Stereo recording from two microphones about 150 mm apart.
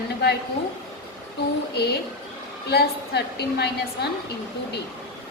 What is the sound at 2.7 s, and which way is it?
A woman's voice, 90° left.